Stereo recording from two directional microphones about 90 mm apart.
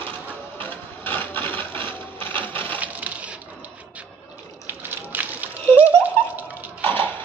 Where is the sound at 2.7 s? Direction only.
15° right (ahead or behind).